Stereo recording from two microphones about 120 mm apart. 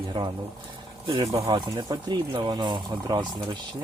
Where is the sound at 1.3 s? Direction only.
25° right (ahead or behind).